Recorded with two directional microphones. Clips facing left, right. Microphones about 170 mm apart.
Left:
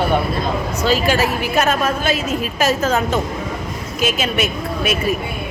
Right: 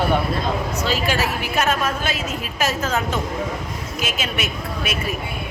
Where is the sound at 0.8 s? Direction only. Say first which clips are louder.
Left 7 dB; 40° left (ahead or behind).